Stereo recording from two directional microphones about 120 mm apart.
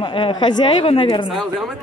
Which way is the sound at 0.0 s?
45° left (ahead or behind).